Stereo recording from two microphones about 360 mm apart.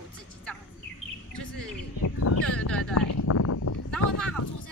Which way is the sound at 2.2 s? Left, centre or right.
Left.